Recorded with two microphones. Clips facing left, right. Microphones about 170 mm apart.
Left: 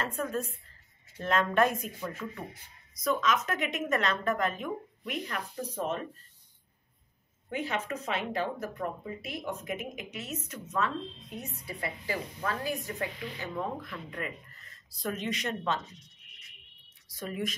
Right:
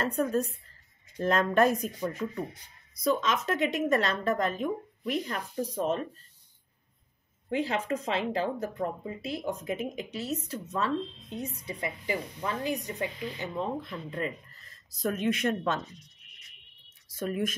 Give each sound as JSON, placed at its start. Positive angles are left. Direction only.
{"t": 0.0, "sound": "speech", "side_deg": -40}
{"t": 3.0, "sound": "speech", "side_deg": -30}
{"t": 7.4, "sound": "speech", "side_deg": -30}
{"t": 11.6, "sound": "speech", "side_deg": -20}
{"t": 14.9, "sound": "speech", "side_deg": -45}
{"t": 17.2, "sound": "speech", "side_deg": -50}